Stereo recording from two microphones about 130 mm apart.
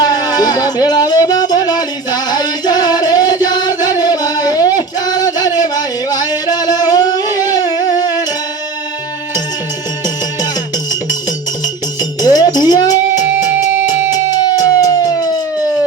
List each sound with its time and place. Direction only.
0.0 s music: 30° left (ahead or behind)
12.2 s music: 30° left (ahead or behind)
13.1 s music: 20° right (ahead or behind)
14.3 s music: 30° left (ahead or behind)